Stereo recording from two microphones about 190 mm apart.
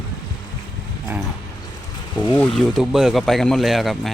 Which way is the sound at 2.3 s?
Centre (ahead or behind).